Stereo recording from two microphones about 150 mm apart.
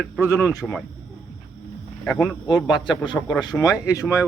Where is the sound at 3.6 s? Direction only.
20° left (ahead or behind).